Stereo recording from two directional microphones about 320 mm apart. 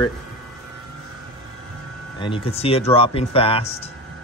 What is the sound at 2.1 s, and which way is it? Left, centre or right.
Speech, centre.